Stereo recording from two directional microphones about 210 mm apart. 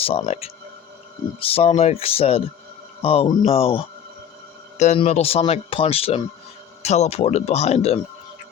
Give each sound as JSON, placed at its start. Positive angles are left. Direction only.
{"t": 0.0, "sound": "speech", "side_deg": 25}